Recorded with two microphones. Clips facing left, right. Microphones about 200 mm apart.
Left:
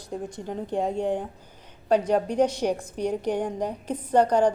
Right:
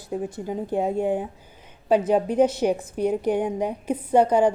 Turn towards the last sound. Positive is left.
turn(degrees=-10)  # may be behind; listen again after turning